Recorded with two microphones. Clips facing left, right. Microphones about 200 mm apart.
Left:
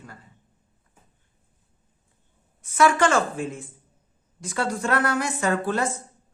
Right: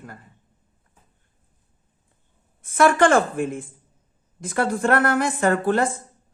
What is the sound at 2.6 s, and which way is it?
Speech, 55° right (ahead or behind).